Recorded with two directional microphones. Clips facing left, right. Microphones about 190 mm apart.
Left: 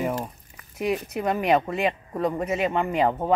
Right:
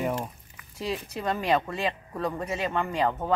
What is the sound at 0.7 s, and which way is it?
Speech, 20° left (ahead or behind).